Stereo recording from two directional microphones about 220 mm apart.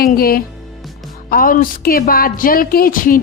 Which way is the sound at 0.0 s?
40° left (ahead or behind).